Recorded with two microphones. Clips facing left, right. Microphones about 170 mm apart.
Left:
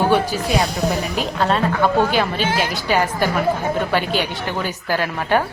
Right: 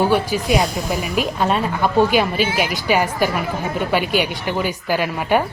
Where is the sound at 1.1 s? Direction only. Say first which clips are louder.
Right 1 dB; 10° right (ahead or behind).